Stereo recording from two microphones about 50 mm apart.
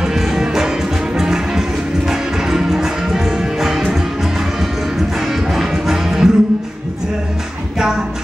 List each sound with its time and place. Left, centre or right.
0.0 s music: centre
5.3 s music: centre